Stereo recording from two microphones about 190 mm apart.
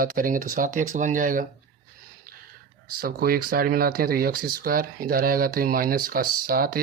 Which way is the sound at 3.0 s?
50° right (ahead or behind).